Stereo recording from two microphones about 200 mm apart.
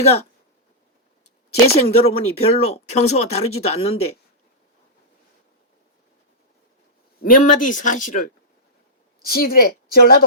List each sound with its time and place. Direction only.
1.7 s speech: 30° left (ahead or behind)
7.2 s a woman's voice: 45° left (ahead or behind)